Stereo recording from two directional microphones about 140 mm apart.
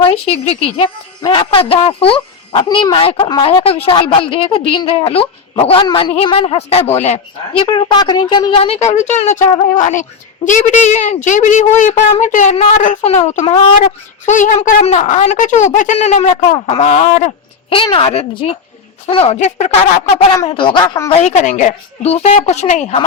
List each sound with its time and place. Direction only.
0.0 s speech: 45° left (ahead or behind)
1.2 s speech: 35° left (ahead or behind)
8.6 s a woman's voice: 55° left (ahead or behind)
14.3 s a woman's voice: 65° left (ahead or behind)
17.9 s speech: 45° left (ahead or behind)
20.6 s speech: 35° left (ahead or behind)
21.1 s a woman's voice: 60° left (ahead or behind)